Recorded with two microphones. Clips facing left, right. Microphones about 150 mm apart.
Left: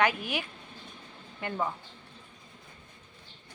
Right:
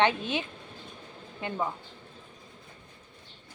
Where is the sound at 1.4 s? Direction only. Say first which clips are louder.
Right 1 dB; 20° right (ahead or behind).